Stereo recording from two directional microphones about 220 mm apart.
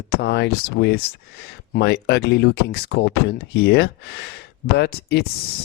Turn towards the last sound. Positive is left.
turn(degrees=45)  # may be behind; listen again after turning